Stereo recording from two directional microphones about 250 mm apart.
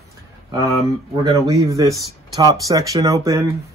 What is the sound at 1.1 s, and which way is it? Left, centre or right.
Speech, centre.